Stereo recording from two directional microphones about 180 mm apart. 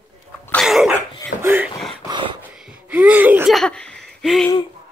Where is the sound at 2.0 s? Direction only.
25° right (ahead or behind).